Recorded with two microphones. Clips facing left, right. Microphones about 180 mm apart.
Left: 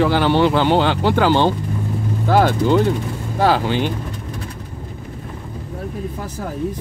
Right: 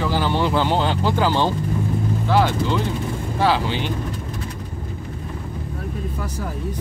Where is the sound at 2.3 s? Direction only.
50° left (ahead or behind).